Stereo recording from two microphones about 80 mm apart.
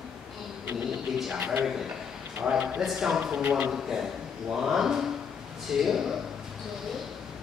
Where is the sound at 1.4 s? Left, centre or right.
Right.